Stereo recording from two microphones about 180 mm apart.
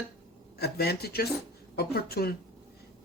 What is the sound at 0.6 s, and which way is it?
Speech, 60° left (ahead or behind).